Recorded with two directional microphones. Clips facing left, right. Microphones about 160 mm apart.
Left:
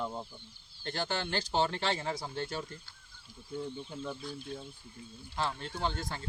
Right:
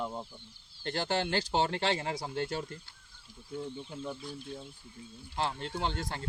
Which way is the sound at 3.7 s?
5° right (ahead or behind).